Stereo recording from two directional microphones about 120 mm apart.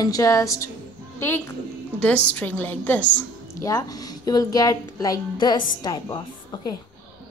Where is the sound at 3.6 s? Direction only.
30° left (ahead or behind).